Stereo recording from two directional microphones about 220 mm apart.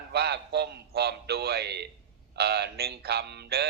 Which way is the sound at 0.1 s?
50° right (ahead or behind).